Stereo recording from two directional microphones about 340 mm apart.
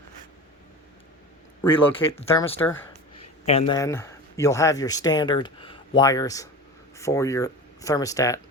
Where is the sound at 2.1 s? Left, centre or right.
Centre.